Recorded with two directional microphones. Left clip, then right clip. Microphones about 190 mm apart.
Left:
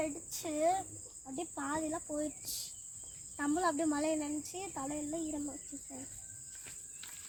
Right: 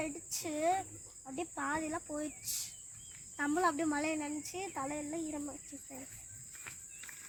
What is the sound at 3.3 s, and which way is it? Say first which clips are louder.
Speech: right 1 dB; 15° left (ahead or behind).